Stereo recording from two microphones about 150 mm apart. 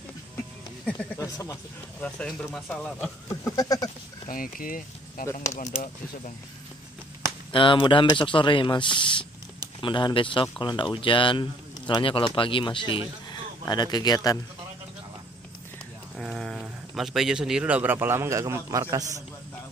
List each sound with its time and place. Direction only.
0.8 s speech: 10° left (ahead or behind)
1.2 s a sound: 20° left (ahead or behind)
2.0 s speech: 10° left (ahead or behind)
3.5 s a sound: 25° left (ahead or behind)
4.3 s speech: 70° left (ahead or behind)
5.4 s speech: 50° left (ahead or behind)
7.5 s speech: 35° left (ahead or behind)
16.2 s speech: centre (ahead or behind); by 19.0 s 20° right (ahead or behind)